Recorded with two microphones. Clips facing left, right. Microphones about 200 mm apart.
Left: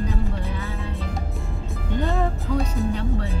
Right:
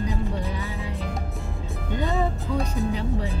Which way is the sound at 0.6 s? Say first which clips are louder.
Left 1 dB; 15° right (ahead or behind).